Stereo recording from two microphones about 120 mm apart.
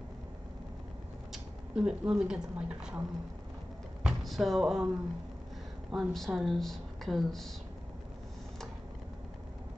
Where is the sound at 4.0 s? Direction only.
Centre (ahead or behind).